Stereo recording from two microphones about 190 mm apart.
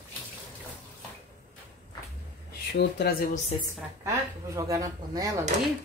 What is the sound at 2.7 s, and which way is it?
Speech, 60° left (ahead or behind).